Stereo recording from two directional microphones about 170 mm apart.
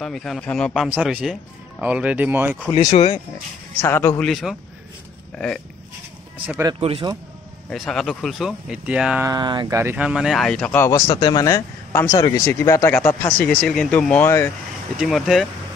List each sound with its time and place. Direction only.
0.0 s speech: centre (ahead or behind)
0.8 s speech: 10° right (ahead or behind)
2.7 s speech: 40° left (ahead or behind)
3.8 s a man's voice: 20° left (ahead or behind)
4.2 s speech: centre (ahead or behind)
6.4 s speech: 10° right (ahead or behind)
6.7 s speech: 30° right (ahead or behind)
7.7 s speech: centre (ahead or behind)
9.2 s speech: 25° right (ahead or behind); by 10.9 s 10° left (ahead or behind)
10.9 s speech: 20° left (ahead or behind)
13.5 s speech: 5° left (ahead or behind)
15.0 s speech: centre (ahead or behind)